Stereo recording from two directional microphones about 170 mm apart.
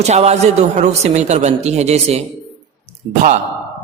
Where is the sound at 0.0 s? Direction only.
40° right (ahead or behind).